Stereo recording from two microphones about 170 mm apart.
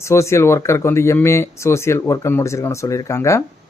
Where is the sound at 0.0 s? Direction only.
15° left (ahead or behind).